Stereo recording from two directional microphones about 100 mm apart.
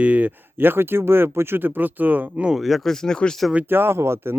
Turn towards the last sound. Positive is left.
turn(degrees=-25)  # may be behind; listen again after turning